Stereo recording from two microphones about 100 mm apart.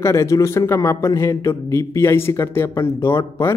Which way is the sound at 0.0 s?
30° left (ahead or behind).